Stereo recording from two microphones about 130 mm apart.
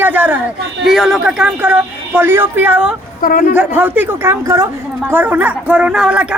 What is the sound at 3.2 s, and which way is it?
Speech, 90° left.